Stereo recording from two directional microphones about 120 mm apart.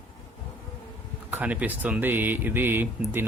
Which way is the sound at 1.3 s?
10° right (ahead or behind).